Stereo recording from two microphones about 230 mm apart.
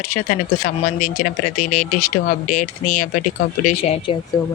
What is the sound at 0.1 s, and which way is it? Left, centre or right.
Speech, left.